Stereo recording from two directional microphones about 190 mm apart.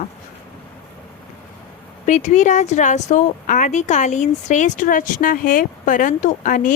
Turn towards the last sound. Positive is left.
turn(degrees=45)  # may be behind; listen again after turning